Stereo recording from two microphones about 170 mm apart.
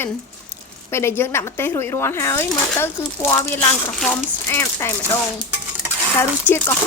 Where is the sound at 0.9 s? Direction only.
15° left (ahead or behind).